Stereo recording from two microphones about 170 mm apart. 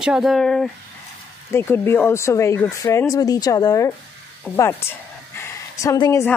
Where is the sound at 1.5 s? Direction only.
15° left (ahead or behind).